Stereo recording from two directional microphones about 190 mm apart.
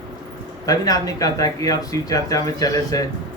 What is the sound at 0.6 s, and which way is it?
Speech, 20° left (ahead or behind).